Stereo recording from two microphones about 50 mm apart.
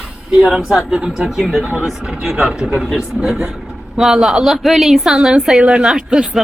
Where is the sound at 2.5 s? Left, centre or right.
Right.